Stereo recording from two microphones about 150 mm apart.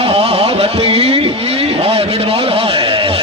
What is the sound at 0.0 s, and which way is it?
Vehicle, 40° right (ahead or behind).